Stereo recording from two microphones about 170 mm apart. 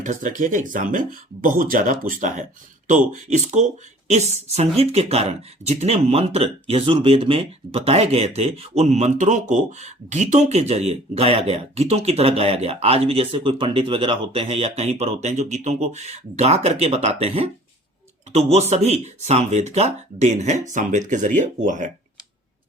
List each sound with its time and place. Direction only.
0.0 s speech: 50° right (ahead or behind)